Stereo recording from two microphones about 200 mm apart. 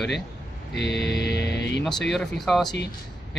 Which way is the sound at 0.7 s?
60° left (ahead or behind).